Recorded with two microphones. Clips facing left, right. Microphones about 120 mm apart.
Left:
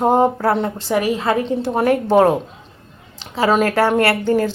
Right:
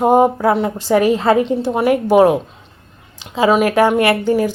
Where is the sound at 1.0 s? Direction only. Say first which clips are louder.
Right 5 dB; 30° right (ahead or behind).